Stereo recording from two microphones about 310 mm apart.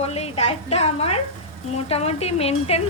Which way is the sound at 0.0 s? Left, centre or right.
Centre.